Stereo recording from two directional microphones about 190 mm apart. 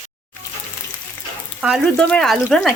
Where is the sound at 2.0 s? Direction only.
5° left (ahead or behind).